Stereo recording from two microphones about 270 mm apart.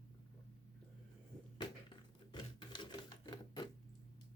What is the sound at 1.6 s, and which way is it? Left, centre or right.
Typewriter, centre.